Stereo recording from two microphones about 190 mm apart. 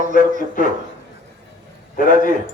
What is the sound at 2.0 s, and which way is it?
Speech, 45° left (ahead or behind).